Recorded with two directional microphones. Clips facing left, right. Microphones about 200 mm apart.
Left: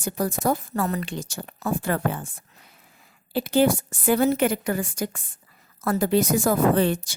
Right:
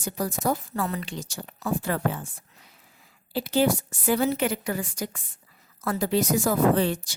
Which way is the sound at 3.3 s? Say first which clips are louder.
Left 3 dB; 55° left (ahead or behind).